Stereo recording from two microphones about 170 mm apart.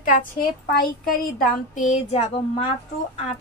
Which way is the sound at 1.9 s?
40° left (ahead or behind).